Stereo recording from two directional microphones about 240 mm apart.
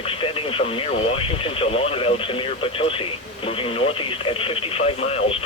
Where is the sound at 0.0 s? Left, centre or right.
Left.